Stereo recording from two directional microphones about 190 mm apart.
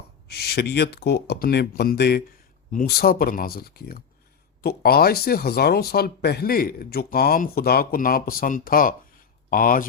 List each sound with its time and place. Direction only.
0.3 s speech: 55° left (ahead or behind)